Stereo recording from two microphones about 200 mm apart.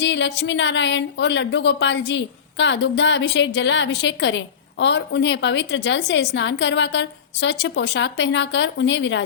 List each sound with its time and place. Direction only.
0.0 s a woman's voice: 60° left (ahead or behind)